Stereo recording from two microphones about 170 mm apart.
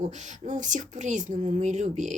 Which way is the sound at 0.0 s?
45° right (ahead or behind).